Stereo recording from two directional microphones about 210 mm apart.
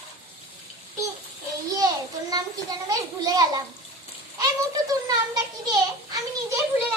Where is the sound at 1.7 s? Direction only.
15° right (ahead or behind).